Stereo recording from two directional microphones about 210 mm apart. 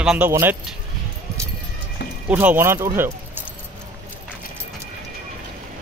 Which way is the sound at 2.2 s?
10° right (ahead or behind).